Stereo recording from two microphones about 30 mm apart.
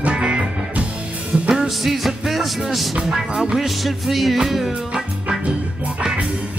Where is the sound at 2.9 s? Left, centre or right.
Centre.